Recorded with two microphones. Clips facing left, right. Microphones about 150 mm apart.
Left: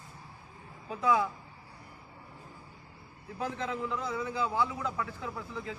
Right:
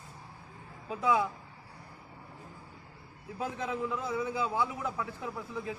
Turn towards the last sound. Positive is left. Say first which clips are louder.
# right 1 dB
turn(degrees=-15)  # may be behind; listen again after turning